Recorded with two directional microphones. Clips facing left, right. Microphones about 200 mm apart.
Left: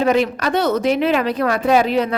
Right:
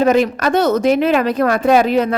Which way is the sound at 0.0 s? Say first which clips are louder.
Right 3 dB; 45° right (ahead or behind).